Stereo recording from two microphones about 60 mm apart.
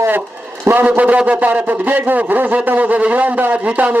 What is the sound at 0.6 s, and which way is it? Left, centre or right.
A man's voice, right.